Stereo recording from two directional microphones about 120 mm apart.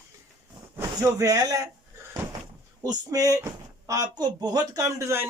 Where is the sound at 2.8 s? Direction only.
30° right (ahead or behind).